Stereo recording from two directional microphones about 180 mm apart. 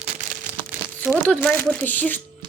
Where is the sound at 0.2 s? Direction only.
45° right (ahead or behind).